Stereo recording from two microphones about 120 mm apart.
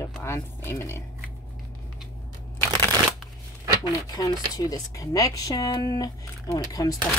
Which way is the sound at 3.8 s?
30° left (ahead or behind).